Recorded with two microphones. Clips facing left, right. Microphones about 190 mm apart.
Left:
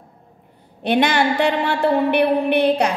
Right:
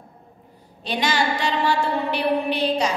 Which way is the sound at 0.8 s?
60° left (ahead or behind).